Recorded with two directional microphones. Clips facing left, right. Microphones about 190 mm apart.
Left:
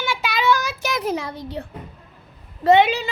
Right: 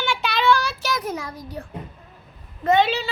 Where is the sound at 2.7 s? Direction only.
15° left (ahead or behind).